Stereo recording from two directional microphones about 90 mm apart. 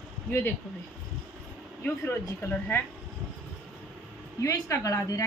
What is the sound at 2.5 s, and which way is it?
Speech, 25° left (ahead or behind).